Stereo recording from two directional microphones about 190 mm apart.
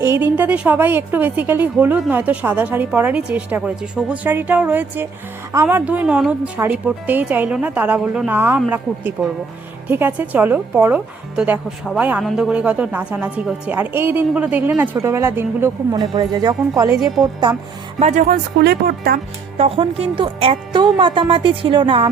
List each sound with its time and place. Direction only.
0.0 s a woman's voice: 15° right (ahead or behind)
16.0 s speech: 20° right (ahead or behind)
18.0 s speech: 40° right (ahead or behind)
19.5 s speech: 30° right (ahead or behind)